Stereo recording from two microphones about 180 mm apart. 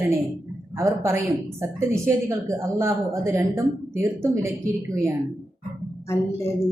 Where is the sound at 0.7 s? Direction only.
15° right (ahead or behind).